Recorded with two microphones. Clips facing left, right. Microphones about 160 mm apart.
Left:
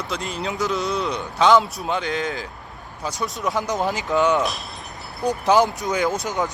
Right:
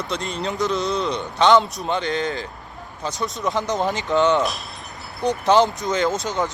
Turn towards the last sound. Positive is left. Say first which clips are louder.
# right 1 dB
turn(degrees=-20)  # may be behind; listen again after turning